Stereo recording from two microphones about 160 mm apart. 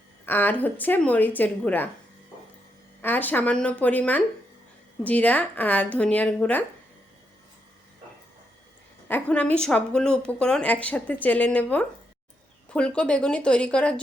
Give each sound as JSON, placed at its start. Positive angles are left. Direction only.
{"t": 0.3, "sound": "a woman's voice", "side_deg": 10}
{"t": 3.0, "sound": "a woman's voice", "side_deg": 10}
{"t": 9.0, "sound": "a woman's voice", "side_deg": 10}